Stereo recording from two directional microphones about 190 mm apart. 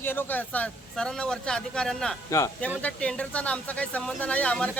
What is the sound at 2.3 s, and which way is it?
Speech, 15° left (ahead or behind).